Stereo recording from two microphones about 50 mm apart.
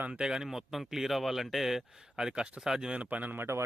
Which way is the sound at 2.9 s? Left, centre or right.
Right.